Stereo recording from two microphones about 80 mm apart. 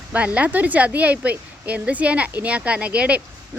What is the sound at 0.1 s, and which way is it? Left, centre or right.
Speech, centre.